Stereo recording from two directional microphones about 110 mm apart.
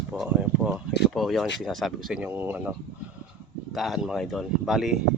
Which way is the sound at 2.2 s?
20° right (ahead or behind).